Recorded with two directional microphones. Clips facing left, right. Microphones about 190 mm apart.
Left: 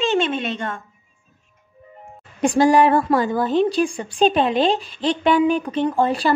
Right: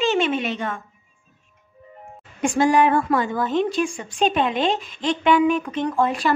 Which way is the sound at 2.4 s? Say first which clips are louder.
Left 3 dB; 35° left (ahead or behind).